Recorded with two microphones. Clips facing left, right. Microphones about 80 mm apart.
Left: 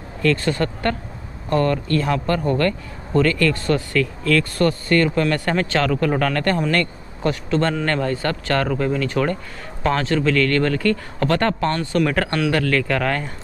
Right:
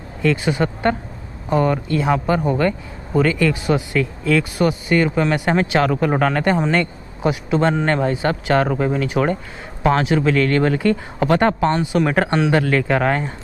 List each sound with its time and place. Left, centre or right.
0.2 s speech: centre